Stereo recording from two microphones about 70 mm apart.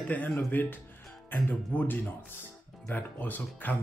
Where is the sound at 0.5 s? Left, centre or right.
Left.